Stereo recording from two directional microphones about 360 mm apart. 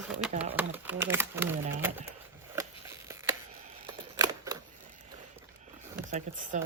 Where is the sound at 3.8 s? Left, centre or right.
Centre.